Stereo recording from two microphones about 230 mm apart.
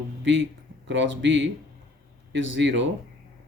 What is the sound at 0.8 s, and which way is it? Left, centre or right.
Speech, right.